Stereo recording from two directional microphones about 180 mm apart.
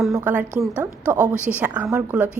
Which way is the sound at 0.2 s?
10° right (ahead or behind).